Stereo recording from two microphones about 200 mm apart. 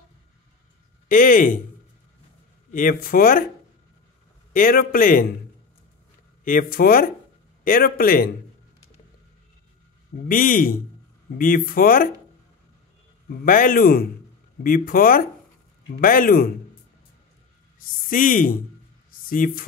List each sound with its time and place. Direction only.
1.0 s speech: 45° left (ahead or behind)
2.7 s speech: 45° left (ahead or behind)
4.6 s speech: 45° left (ahead or behind)
6.4 s speech: 45° left (ahead or behind)
10.2 s speech: 45° left (ahead or behind)
13.3 s speech: 45° left (ahead or behind)
18.0 s speech: 45° left (ahead or behind)